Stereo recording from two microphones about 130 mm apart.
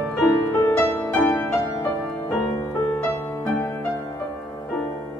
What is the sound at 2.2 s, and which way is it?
Music, 20° left (ahead or behind).